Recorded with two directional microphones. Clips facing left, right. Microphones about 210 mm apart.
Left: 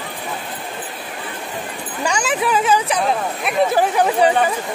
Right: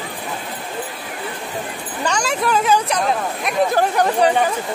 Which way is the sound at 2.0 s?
5° left (ahead or behind).